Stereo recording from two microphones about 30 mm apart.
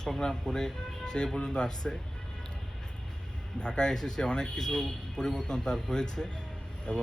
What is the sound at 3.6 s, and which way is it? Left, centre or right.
Speech, left.